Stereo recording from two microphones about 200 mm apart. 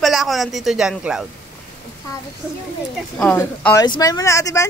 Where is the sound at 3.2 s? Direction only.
5° left (ahead or behind).